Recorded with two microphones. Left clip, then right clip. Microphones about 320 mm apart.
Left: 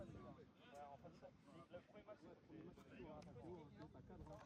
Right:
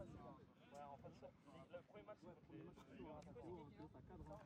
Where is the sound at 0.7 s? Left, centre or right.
Right.